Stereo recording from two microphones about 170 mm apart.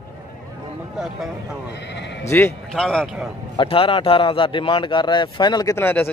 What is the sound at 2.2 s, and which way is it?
Speech, 15° left (ahead or behind).